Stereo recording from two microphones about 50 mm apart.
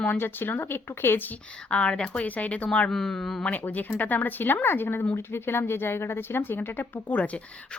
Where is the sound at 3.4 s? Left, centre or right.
Left.